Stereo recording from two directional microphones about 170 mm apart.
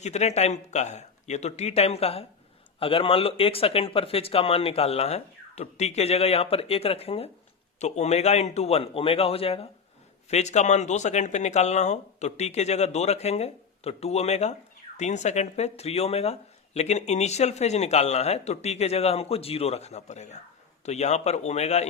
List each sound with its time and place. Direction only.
0.0 s speech: 40° left (ahead or behind)